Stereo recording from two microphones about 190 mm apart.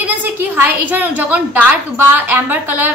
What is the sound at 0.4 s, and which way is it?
A woman's voice, 10° right (ahead or behind).